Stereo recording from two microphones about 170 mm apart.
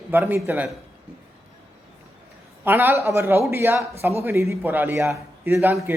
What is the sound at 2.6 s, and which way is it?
A man's voice, 10° right (ahead or behind).